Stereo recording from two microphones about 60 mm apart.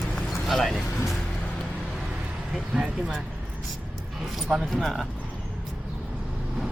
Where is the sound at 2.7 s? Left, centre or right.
Centre.